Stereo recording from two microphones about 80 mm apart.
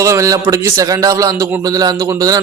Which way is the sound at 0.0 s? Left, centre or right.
Right.